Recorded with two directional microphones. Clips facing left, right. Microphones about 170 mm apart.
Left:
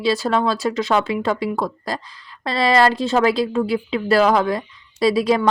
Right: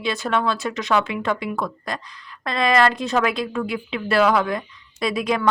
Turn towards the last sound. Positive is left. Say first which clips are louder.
# left 6 dB
turn(degrees=30)  # may be behind; listen again after turning